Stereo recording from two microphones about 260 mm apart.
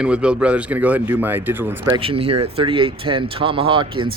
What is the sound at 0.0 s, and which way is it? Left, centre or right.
Speech, centre.